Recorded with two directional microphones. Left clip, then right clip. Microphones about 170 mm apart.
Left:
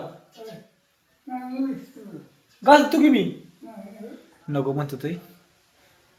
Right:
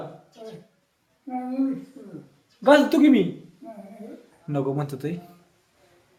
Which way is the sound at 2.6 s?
30° right (ahead or behind).